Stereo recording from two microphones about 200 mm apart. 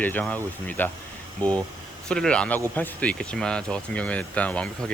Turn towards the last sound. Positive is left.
turn(degrees=5)  # may be behind; listen again after turning